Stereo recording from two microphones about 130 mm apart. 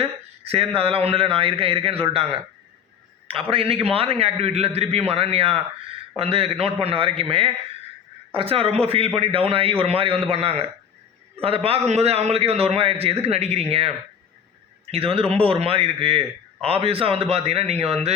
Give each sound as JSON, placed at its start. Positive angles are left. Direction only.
{"t": 0.0, "sound": "a man's voice", "side_deg": -50}
{"t": 3.5, "sound": "a man's voice", "side_deg": -45}